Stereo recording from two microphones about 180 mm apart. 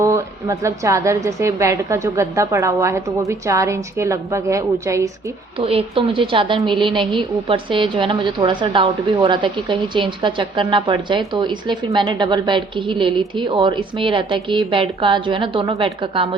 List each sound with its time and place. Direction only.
0.0 s a woman's voice: 15° right (ahead or behind)
5.5 s a woman's voice: 30° right (ahead or behind)